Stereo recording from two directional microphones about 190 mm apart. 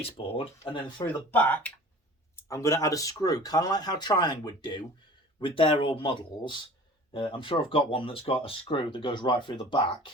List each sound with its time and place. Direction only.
0.0 s speech: 30° left (ahead or behind)
1.3 s speech: 10° left (ahead or behind); by 10.1 s 25° left (ahead or behind)